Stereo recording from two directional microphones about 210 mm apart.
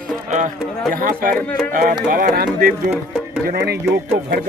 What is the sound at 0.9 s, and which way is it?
Speech, 40° right (ahead or behind).